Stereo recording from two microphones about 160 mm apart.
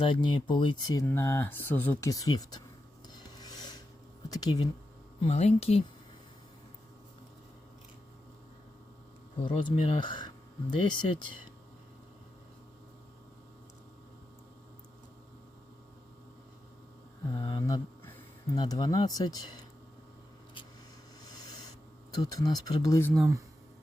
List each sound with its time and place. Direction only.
0.0 s speech: 30° left (ahead or behind)
1.0 s speech: 15° left (ahead or behind)
3.3 s a sound: 25° left (ahead or behind)
4.4 s speech: 25° left (ahead or behind)
5.2 s speech: 40° left (ahead or behind)
9.5 s speech: 35° left (ahead or behind)
17.3 s speech: 35° left (ahead or behind)
17.7 s a sound: 15° left (ahead or behind)
18.5 s speech: 25° left (ahead or behind)
22.2 s speech: 25° left (ahead or behind)